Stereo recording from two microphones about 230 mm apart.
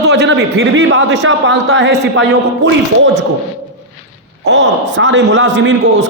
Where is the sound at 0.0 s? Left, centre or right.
Right.